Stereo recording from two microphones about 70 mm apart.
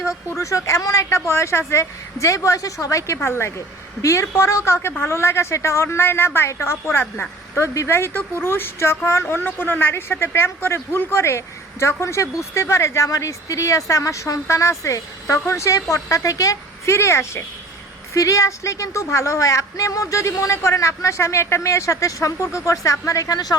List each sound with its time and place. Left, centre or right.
0.3 s speech: left
1.3 s a woman's voice: left